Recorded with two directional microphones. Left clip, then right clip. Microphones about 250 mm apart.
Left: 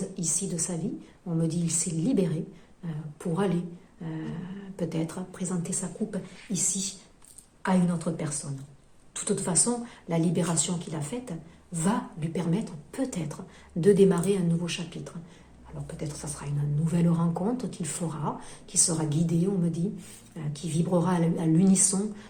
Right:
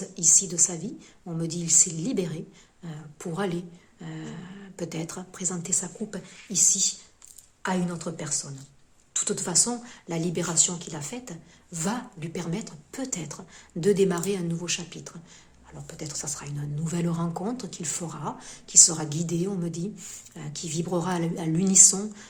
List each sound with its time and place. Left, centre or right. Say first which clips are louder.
0.1 s a woman's voice: right 9 dB; right
7.6 s a woman's voice: left 1 dB; right